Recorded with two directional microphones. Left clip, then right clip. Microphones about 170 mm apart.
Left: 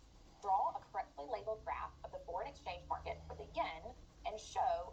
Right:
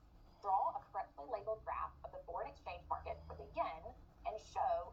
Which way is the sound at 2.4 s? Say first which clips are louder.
Left 2 dB; 35° left (ahead or behind).